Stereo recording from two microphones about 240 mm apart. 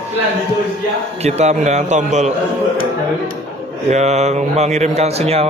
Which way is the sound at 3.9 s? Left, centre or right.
Right.